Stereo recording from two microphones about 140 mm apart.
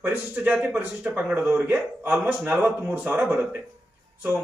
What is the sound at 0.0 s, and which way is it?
A man's voice, 15° right (ahead or behind).